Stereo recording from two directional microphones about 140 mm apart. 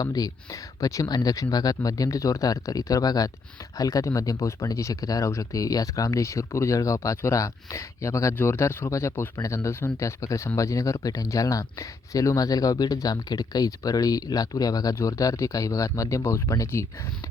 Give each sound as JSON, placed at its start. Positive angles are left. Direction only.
{"t": 0.0, "sound": "speech", "side_deg": 25}